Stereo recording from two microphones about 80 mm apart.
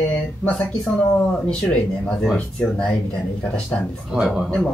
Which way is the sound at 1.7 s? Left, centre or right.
Centre.